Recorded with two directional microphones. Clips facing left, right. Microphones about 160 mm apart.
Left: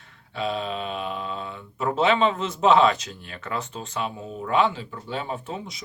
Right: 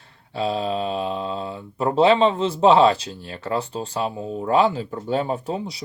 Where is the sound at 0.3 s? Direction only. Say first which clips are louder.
Right 5 dB; 35° right (ahead or behind).